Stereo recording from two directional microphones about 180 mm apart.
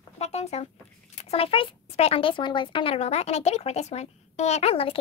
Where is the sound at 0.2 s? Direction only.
35° left (ahead or behind).